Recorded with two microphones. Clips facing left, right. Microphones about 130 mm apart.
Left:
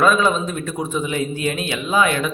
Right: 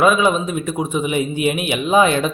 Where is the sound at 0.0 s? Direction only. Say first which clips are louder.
Right 2 dB; 10° right (ahead or behind).